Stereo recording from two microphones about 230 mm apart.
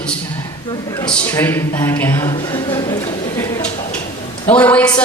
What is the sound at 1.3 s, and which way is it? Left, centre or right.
A man's voice, centre.